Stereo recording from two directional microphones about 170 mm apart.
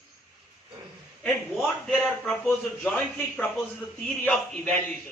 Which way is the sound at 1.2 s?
Centre (ahead or behind).